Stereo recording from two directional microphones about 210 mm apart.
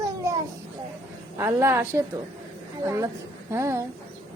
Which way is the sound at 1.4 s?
15° right (ahead or behind).